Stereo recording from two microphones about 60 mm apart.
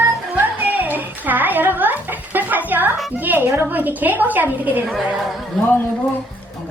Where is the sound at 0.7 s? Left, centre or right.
Right.